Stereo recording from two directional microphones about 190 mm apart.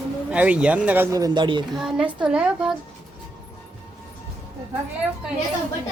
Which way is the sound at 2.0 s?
5° right (ahead or behind).